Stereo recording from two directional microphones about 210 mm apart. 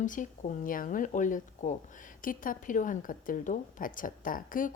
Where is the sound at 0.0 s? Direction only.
40° left (ahead or behind).